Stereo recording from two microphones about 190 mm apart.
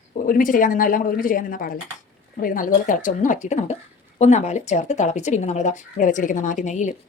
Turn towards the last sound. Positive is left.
turn(degrees=40)  # may be behind; listen again after turning